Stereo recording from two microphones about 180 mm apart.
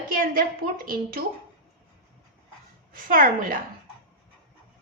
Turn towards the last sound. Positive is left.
turn(degrees=-50)  # may be behind; listen again after turning